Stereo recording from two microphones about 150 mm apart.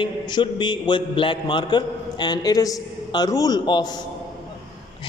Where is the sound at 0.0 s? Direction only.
30° left (ahead or behind).